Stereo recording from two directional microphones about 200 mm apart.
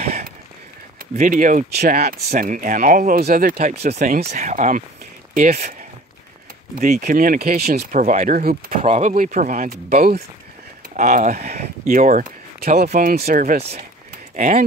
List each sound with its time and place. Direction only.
0.0 s a sound: 40° right (ahead or behind)
1.1 s speech: 45° right (ahead or behind)
6.8 s speech: 40° right (ahead or behind)